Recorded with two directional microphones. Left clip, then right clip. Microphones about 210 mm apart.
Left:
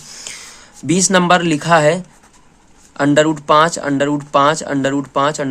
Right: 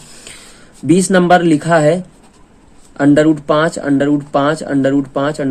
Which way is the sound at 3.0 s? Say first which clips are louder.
Right 2 dB; 25° left (ahead or behind).